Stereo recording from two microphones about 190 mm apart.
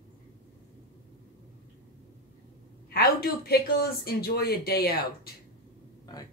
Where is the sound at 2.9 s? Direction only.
55° left (ahead or behind).